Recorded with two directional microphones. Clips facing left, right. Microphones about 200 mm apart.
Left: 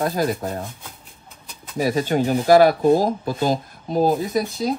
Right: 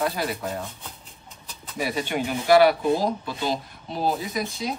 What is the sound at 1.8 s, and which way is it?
Speech, 40° left (ahead or behind).